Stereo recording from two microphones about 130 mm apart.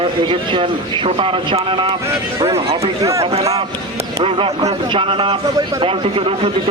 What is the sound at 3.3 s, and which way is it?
Speech, 50° right (ahead or behind).